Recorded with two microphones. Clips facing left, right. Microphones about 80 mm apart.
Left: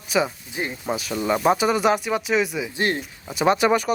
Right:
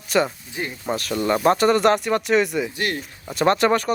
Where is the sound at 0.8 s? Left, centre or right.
Centre.